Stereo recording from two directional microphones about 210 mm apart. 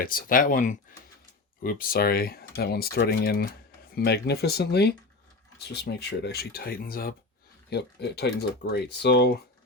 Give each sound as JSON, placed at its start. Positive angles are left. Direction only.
{"t": 0.0, "sound": "speech", "side_deg": 45}